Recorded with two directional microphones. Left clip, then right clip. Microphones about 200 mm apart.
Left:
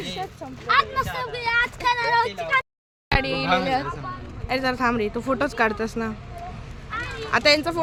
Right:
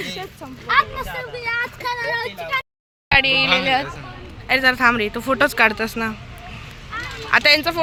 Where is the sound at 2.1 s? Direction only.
35° left (ahead or behind).